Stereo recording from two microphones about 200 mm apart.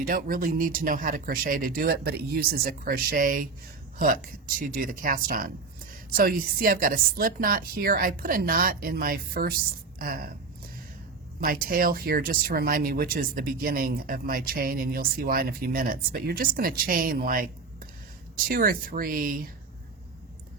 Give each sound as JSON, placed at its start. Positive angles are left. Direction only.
{"t": 0.0, "sound": "speech", "side_deg": -45}
{"t": 11.3, "sound": "speech", "side_deg": -45}